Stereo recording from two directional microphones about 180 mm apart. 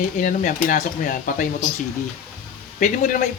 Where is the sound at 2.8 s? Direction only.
45° left (ahead or behind).